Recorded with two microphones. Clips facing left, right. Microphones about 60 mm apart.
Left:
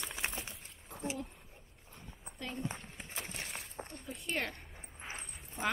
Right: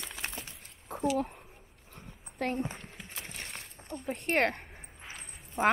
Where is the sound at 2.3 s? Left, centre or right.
Right.